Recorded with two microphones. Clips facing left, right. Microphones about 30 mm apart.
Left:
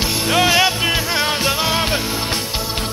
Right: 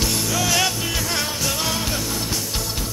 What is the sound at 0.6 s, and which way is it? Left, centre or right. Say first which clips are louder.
Music: left 6 dB; left.